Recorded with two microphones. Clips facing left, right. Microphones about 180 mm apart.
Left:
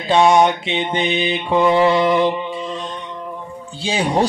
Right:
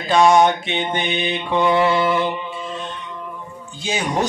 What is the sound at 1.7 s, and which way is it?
Mantra, 30° left (ahead or behind).